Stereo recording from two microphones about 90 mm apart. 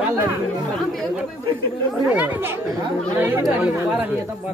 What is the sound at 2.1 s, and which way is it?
Speech, 20° right (ahead or behind).